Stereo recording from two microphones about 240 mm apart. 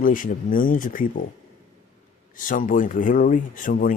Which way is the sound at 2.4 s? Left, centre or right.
Left.